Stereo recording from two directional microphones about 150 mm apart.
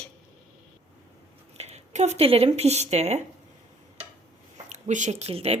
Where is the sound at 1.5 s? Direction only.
45° right (ahead or behind).